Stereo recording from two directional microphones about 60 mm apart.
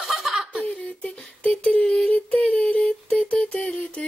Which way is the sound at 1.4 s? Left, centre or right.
Centre.